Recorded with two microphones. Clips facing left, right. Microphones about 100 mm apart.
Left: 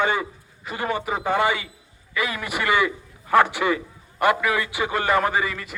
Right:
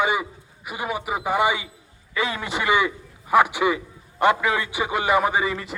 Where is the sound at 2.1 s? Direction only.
25° right (ahead or behind).